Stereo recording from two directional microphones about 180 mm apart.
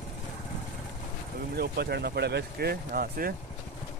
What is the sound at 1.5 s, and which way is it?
Speech, 60° right (ahead or behind).